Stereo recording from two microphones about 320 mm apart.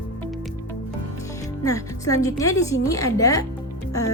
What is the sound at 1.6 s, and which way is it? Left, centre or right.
A woman's voice, centre.